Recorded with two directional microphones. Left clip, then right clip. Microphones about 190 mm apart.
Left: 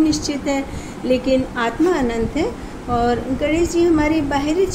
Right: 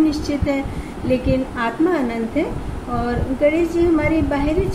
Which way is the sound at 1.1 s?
50° left (ahead or behind).